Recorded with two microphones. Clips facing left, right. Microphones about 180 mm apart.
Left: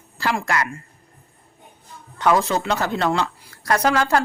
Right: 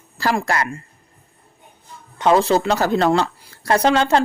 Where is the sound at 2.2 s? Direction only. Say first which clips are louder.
Right 4 dB; 30° right (ahead or behind).